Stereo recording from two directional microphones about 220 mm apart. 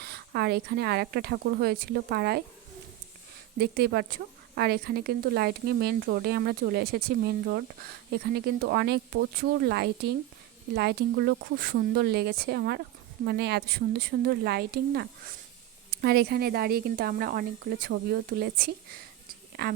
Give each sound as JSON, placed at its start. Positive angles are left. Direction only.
{"t": 0.0, "sound": "a woman's voice", "side_deg": -45}
{"t": 3.6, "sound": "a woman's voice", "side_deg": -45}